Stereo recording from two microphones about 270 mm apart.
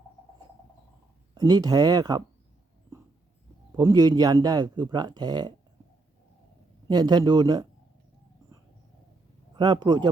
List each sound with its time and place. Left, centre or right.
1.4 s speech: centre
3.7 s speech: centre
6.8 s speech: centre
9.6 s speech: centre